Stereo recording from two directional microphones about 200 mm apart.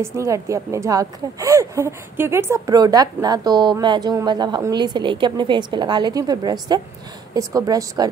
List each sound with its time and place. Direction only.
0.0 s a woman's voice: 15° right (ahead or behind)